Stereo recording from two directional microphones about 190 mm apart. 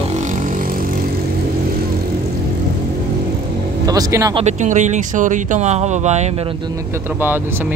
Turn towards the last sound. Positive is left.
turn(degrees=-35)  # may be behind; listen again after turning